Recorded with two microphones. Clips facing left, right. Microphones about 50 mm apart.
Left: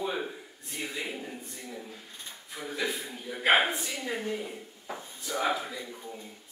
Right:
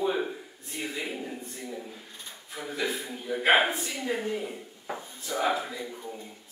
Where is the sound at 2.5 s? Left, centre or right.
Centre.